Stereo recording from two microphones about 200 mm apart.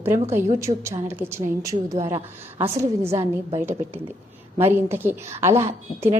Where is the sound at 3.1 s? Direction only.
30° right (ahead or behind).